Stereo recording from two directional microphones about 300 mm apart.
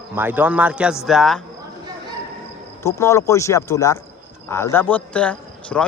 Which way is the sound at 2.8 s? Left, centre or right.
Centre.